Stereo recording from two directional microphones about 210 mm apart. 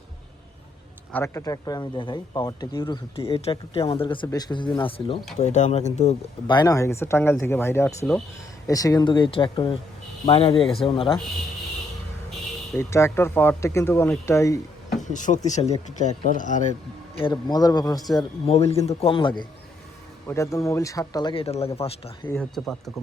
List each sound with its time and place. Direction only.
1.1 s speech: 15° left (ahead or behind); by 6.1 s 35° left (ahead or behind)
6.5 s speech: 20° left (ahead or behind)
12.7 s speech: 10° left (ahead or behind)
15.0 s speech: 35° left (ahead or behind)
17.3 s speech: 20° left (ahead or behind)
20.2 s speech: 15° left (ahead or behind)
22.3 s speech: 5° left (ahead or behind)